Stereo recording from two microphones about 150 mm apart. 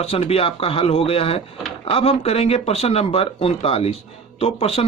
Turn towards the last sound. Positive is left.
turn(degrees=40)  # may be behind; listen again after turning